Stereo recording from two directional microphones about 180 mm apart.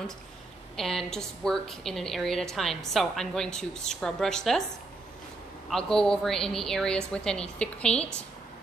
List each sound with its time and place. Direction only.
0.7 s a woman's voice: centre (ahead or behind)
5.7 s a woman's voice: 5° left (ahead or behind)